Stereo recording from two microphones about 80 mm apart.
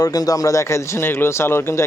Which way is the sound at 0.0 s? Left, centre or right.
Left.